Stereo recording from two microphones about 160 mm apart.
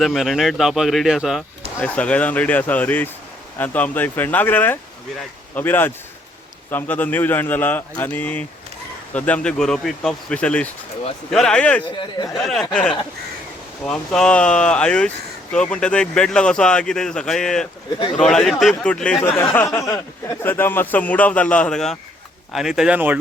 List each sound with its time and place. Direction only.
0.0 s speech: centre (ahead or behind)
11.9 s speech: 30° left (ahead or behind)
12.4 s speech: centre (ahead or behind)
19.4 s speech: 15° left (ahead or behind); by 23.2 s 10° right (ahead or behind)